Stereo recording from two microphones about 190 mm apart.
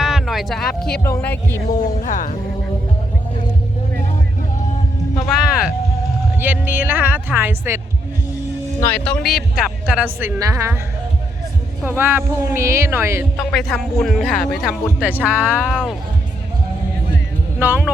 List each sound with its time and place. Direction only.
0.0 s speech: centre (ahead or behind)
2.0 s speech: 45° left (ahead or behind)
5.3 s speech: 5° right (ahead or behind)
8.8 s speech: 10° left (ahead or behind); by 10.8 s 15° right (ahead or behind)
11.8 s speech: 10° right (ahead or behind)
13.3 s speech: centre (ahead or behind)
15.7 s speech: 5° left (ahead or behind)
17.6 s speech: 10° right (ahead or behind)